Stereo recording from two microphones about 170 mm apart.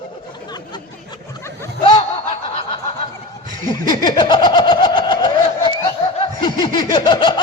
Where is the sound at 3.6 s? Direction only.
25° left (ahead or behind).